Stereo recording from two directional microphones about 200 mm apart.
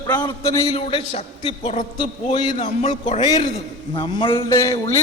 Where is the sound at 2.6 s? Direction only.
35° left (ahead or behind).